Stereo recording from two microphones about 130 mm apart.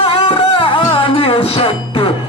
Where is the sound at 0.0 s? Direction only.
40° left (ahead or behind).